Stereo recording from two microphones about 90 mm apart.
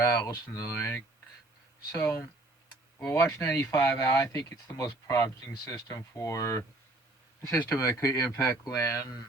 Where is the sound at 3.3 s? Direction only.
30° left (ahead or behind).